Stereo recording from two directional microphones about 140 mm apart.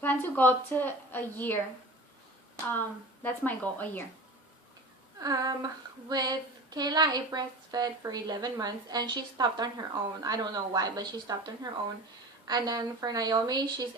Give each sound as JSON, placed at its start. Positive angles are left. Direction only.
{"t": 0.0, "sound": "a woman's voice", "side_deg": 15}
{"t": 3.2, "sound": "a woman's voice", "side_deg": 10}
{"t": 5.2, "sound": "female singing", "side_deg": -25}